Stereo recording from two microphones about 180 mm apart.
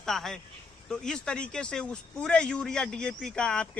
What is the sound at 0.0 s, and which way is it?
Speech, centre (ahead or behind).